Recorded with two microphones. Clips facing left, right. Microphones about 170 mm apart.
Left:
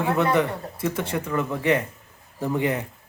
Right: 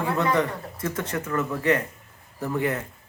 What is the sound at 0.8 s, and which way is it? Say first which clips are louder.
Speech: left 2 dB; 10° left (ahead or behind).